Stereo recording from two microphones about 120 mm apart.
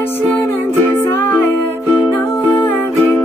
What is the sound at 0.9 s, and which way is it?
Music, 15° left (ahead or behind).